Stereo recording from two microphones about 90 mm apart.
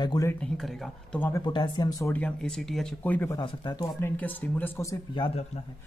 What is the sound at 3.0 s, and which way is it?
Speech, 20° left (ahead or behind).